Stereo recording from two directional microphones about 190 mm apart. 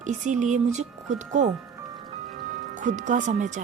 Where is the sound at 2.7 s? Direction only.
40° right (ahead or behind).